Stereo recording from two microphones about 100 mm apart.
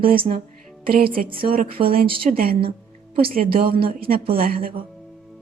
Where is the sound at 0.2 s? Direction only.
70° right (ahead or behind).